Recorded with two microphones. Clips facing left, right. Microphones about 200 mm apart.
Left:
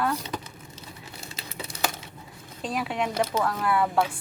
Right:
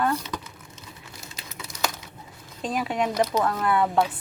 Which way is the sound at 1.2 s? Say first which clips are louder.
Left 4 dB; 30° left (ahead or behind).